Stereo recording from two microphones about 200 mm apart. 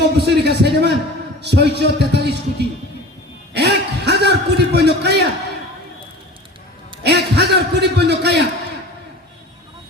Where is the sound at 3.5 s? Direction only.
55° right (ahead or behind).